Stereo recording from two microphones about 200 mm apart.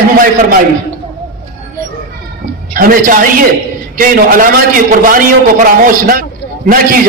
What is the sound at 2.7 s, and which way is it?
A man's voice, 45° right (ahead or behind).